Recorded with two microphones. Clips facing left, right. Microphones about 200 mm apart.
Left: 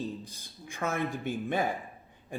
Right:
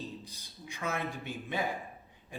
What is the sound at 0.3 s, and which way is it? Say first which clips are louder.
A man's voice: left 1 dB; 50° left (ahead or behind).